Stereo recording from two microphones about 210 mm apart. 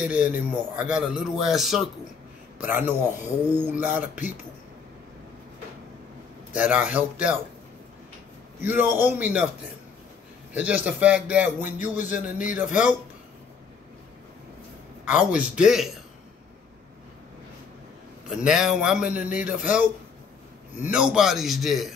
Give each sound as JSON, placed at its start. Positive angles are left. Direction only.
{"t": 0.0, "sound": "speech", "side_deg": -5}
{"t": 6.5, "sound": "speech", "side_deg": -5}
{"t": 8.6, "sound": "speech", "side_deg": -10}
{"t": 10.5, "sound": "speech", "side_deg": -5}
{"t": 12.6, "sound": "speech", "side_deg": 35}
{"t": 15.0, "sound": "speech", "side_deg": -5}
{"t": 18.4, "sound": "speech", "side_deg": -5}
{"t": 20.8, "sound": "speech", "side_deg": -5}